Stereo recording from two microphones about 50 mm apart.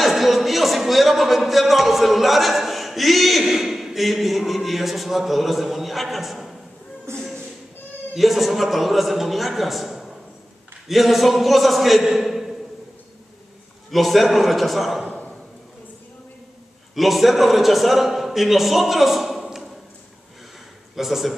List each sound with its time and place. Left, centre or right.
0.0 s speech: centre
7.1 s speech: right
8.1 s a man's voice: centre
13.8 s a man's voice: centre
16.9 s a man's voice: centre
20.9 s a man's voice: centre